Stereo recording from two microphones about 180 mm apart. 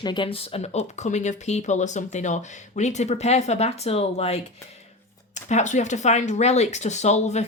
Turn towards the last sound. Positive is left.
turn(degrees=40)  # may be behind; listen again after turning